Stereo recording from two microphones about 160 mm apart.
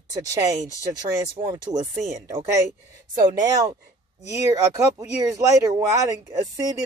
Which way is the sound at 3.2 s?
20° right (ahead or behind).